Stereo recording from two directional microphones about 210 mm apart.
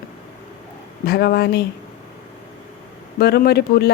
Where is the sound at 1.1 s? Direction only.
50° left (ahead or behind).